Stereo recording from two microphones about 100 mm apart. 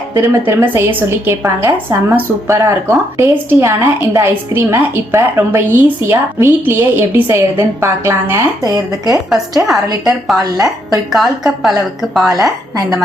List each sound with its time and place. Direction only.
0.1 s a woman's voice: 25° right (ahead or behind)
8.6 s speech: 40° right (ahead or behind)
9.3 s a woman's voice: 5° right (ahead or behind)
10.4 s speech: 40° right (ahead or behind)
11.1 s a woman's voice: centre (ahead or behind)